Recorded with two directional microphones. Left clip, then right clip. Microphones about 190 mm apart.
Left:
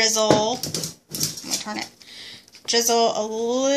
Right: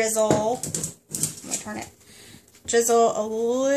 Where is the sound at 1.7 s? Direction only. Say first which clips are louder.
Left 5 dB; 10° right (ahead or behind).